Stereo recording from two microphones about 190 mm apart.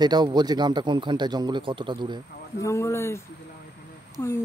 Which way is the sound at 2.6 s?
15° left (ahead or behind).